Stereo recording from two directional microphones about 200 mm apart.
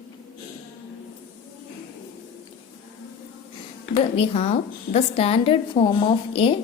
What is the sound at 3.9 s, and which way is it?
A woman's voice, 30° left (ahead or behind).